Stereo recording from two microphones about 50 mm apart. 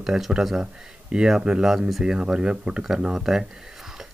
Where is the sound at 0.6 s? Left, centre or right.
Centre.